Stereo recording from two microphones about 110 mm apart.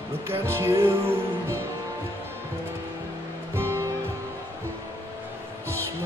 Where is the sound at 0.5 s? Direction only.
25° right (ahead or behind).